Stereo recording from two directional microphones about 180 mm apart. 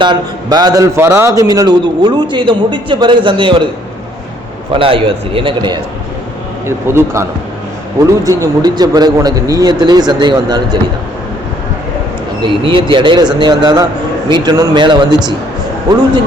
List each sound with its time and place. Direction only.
0.0 s a man's voice: 25° right (ahead or behind)
4.7 s a man's voice: 30° right (ahead or behind)
6.7 s a man's voice: 15° right (ahead or behind)
12.4 s a man's voice: 30° right (ahead or behind)